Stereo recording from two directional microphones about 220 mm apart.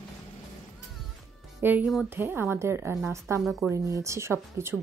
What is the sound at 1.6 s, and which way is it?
A woman's voice, 10° right (ahead or behind).